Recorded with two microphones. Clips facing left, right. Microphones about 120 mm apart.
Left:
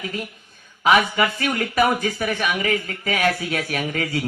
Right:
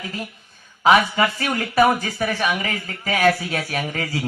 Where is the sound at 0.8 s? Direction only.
35° right (ahead or behind).